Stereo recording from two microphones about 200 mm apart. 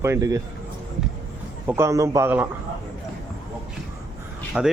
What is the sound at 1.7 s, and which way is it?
Speech, 15° right (ahead or behind).